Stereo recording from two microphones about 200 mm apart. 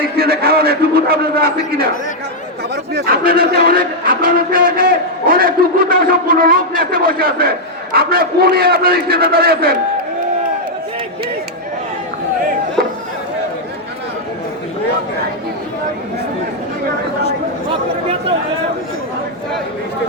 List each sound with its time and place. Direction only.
0.2 s a man's voice: 50° right (ahead or behind)
2.9 s a man's voice: 50° right (ahead or behind)